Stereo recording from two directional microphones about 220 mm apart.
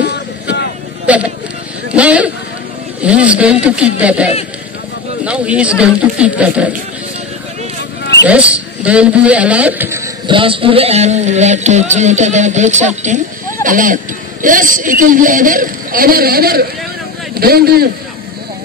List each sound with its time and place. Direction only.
0.0 s vehicle: 50° left (ahead or behind)
1.0 s a sound: 5° right (ahead or behind)
3.0 s speech: 5° right (ahead or behind)
8.3 s a man's voice: 5° right (ahead or behind); by 17.8 s 45° right (ahead or behind)